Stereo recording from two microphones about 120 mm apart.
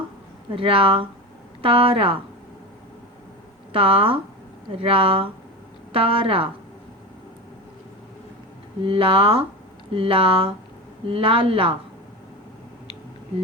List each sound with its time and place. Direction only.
0.5 s a woman's voice: 50° right (ahead or behind)
3.7 s a woman's voice: 50° right (ahead or behind)
8.8 s a woman's voice: 50° right (ahead or behind)